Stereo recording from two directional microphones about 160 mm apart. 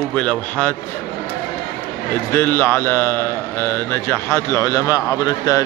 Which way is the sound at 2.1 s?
15° left (ahead or behind).